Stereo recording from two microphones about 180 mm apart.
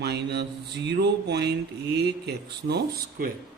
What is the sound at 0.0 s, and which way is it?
Mantra, 70° right (ahead or behind).